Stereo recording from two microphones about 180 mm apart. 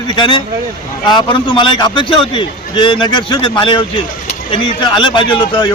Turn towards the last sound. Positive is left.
turn(degrees=25)  # may be behind; listen again after turning